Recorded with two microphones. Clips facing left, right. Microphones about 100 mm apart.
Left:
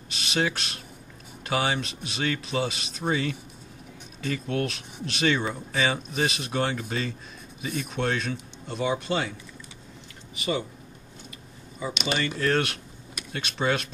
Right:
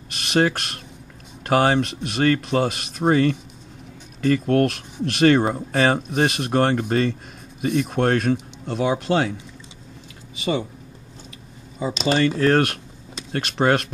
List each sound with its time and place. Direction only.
0.1 s speech: 55° right (ahead or behind)
11.8 s speech: 35° right (ahead or behind)
12.4 s speech: 50° right (ahead or behind)